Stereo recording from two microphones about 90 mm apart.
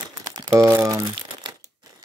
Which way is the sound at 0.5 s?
30° right (ahead or behind).